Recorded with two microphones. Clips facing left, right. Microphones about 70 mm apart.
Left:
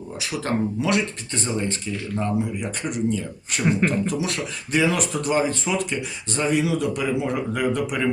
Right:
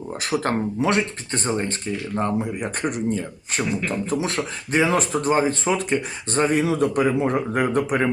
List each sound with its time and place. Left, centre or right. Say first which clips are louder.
0.2 s speech: right 5 dB; right
0.8 s speech: right 2 dB; right
3.7 s speech: left 7 dB; left
4.0 s speech: right 1 dB; right